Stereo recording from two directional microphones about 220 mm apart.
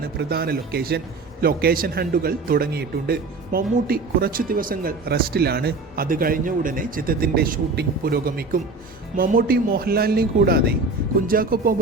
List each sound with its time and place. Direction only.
0.2 s a man's voice: 45° right (ahead or behind)